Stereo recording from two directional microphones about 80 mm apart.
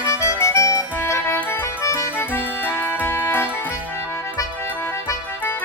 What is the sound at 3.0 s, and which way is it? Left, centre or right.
Music, left.